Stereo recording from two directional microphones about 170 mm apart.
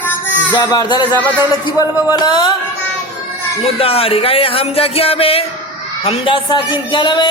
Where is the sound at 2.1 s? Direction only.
25° left (ahead or behind).